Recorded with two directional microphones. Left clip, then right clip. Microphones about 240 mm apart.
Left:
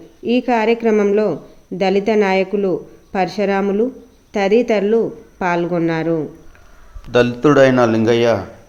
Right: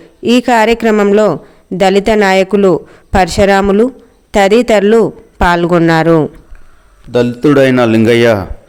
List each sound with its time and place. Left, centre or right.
0.2 s speech: right
7.1 s a man's voice: right